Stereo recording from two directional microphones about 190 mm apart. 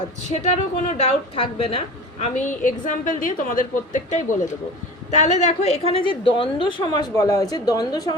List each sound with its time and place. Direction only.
0.4 s a woman's voice: 35° left (ahead or behind); by 8.1 s 20° left (ahead or behind)